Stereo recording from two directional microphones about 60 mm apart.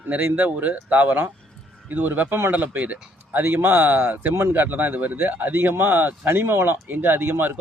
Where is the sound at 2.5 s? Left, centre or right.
Right.